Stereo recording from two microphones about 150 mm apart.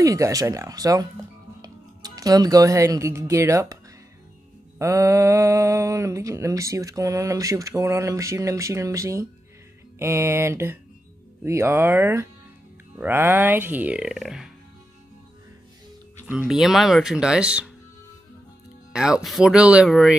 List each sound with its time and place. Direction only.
0.0 s speech: 20° right (ahead or behind)
4.7 s speech: 20° right (ahead or behind); by 14.5 s 5° right (ahead or behind)
16.3 s speech: 5° right (ahead or behind)
18.9 s speech: 5° right (ahead or behind)